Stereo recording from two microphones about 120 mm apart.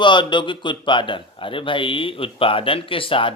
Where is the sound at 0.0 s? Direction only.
40° left (ahead or behind).